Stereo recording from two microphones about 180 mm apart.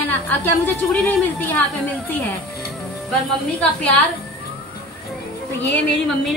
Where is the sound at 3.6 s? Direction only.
5° left (ahead or behind).